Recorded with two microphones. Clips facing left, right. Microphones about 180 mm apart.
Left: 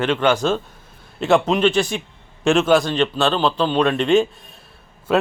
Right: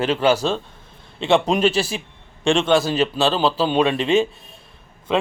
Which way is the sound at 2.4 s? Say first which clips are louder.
Left 2 dB; 5° left (ahead or behind).